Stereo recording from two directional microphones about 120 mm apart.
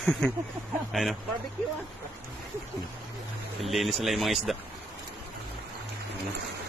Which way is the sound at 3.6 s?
Centre (ahead or behind).